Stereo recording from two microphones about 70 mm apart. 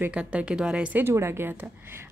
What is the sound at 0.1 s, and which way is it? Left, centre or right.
Speech, centre.